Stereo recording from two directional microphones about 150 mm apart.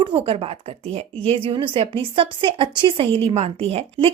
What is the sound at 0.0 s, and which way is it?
A woman's voice, 35° right (ahead or behind).